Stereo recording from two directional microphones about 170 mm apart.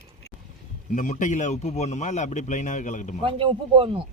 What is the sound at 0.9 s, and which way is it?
A man's voice, 50° left (ahead or behind).